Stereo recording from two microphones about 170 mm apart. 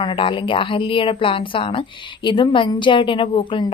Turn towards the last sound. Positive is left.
turn(degrees=30)  # may be behind; listen again after turning